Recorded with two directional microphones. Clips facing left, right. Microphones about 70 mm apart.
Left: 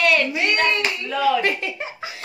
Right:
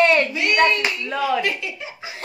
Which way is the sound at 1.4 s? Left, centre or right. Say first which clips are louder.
Left 2 dB; left.